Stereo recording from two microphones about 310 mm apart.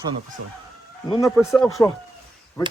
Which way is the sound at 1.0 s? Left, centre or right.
Centre.